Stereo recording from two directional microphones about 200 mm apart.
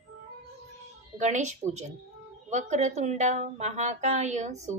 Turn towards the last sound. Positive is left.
turn(degrees=-35)  # may be behind; listen again after turning